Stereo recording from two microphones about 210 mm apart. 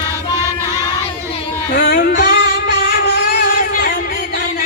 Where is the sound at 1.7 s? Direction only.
40° left (ahead or behind).